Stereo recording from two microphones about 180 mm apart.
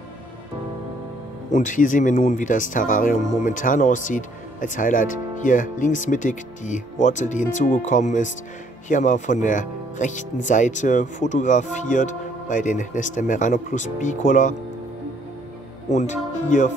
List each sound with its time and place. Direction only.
1.5 s speech: 45° left (ahead or behind)
15.9 s speech: 40° left (ahead or behind)